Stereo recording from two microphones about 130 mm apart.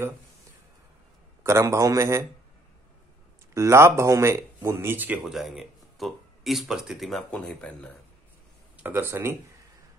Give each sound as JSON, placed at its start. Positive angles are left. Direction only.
{"t": 1.4, "sound": "speech", "side_deg": -20}
{"t": 3.5, "sound": "speech", "side_deg": -20}
{"t": 5.2, "sound": "speech", "side_deg": -5}
{"t": 8.7, "sound": "speech", "side_deg": -15}